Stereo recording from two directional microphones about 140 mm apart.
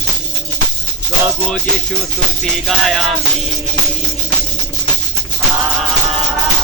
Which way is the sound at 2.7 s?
Centre (ahead or behind).